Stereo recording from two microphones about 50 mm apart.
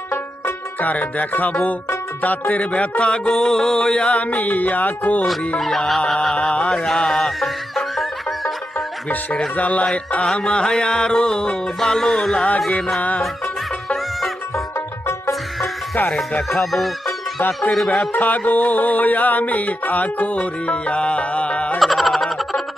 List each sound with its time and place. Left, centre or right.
0.7 s music: left
5.6 s music: centre
7.3 s music: centre
9.6 s music: left
16.4 s music: centre
18.1 s music: left
21.7 s music: centre